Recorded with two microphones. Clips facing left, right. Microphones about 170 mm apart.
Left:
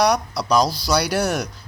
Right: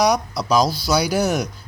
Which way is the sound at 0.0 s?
Centre (ahead or behind).